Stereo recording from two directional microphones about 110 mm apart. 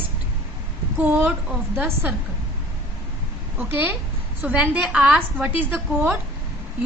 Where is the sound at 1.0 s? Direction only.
15° right (ahead or behind).